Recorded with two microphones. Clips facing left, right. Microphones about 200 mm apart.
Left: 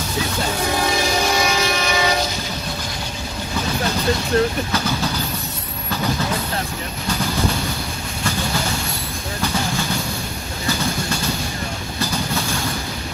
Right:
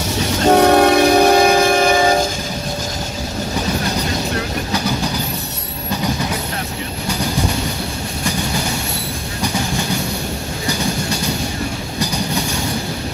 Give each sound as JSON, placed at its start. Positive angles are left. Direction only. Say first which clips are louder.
{"t": 0.5, "sound": "train", "louder": "right 15 dB", "side_deg": -70}